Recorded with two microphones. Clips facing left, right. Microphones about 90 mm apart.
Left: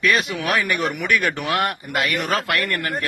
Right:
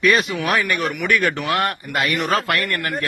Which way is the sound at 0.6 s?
15° left (ahead or behind).